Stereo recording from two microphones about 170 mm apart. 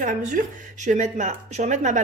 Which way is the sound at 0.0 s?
50° right (ahead or behind).